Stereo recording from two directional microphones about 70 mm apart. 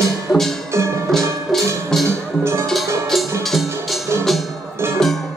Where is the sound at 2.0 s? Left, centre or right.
Right.